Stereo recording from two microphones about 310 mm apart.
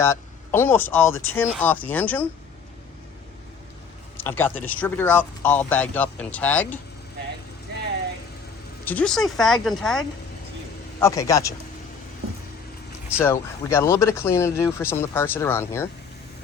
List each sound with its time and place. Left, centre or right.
0.0 s speech: centre
4.2 s speech: centre
8.8 s speech: centre
11.0 s speech: centre
13.1 s speech: centre